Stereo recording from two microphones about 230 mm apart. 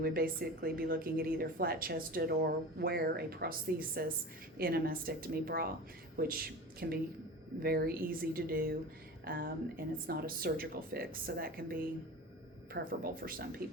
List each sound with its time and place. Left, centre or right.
0.0 s a woman's voice: right